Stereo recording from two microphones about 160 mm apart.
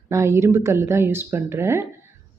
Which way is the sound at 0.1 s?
15° right (ahead or behind).